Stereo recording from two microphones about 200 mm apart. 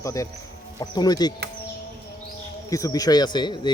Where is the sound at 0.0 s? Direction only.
15° left (ahead or behind).